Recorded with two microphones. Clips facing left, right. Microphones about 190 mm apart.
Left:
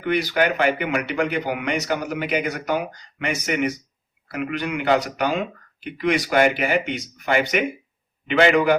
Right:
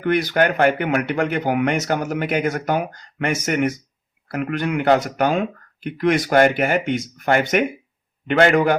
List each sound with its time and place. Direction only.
0.0 s speech: 50° right (ahead or behind)